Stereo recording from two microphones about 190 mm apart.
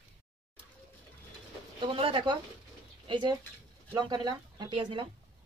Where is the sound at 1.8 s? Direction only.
30° right (ahead or behind).